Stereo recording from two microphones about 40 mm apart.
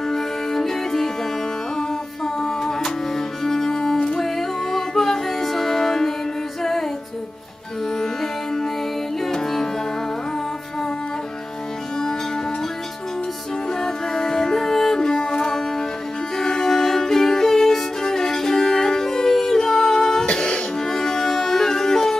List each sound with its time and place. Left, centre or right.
0.1 s music: centre
8.0 s music: centre
13.7 s music: centre
20.8 s music: centre